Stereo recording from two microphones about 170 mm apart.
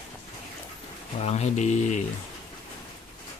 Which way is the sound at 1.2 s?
40° left (ahead or behind).